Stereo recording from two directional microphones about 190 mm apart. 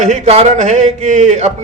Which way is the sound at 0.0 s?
35° right (ahead or behind).